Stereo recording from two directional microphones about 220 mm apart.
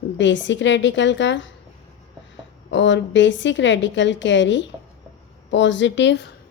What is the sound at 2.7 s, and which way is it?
A woman's voice, 55° left (ahead or behind).